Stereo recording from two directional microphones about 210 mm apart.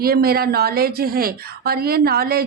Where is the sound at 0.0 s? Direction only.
45° right (ahead or behind).